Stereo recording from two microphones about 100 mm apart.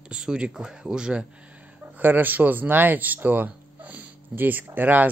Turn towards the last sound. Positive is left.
turn(degrees=-20)  # may be behind; listen again after turning